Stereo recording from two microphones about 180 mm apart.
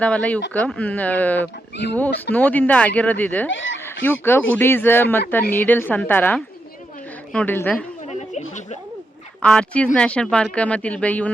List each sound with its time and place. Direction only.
0.0 s speech: 10° left (ahead or behind)
3.5 s speech: 90° left
3.8 s speech: 10° left (ahead or behind)
8.0 s a sound: 40° left (ahead or behind)
9.4 s speech: 5° left (ahead or behind)